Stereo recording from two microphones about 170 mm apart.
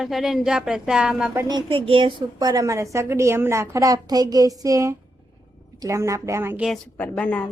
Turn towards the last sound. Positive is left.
turn(degrees=10)  # may be behind; listen again after turning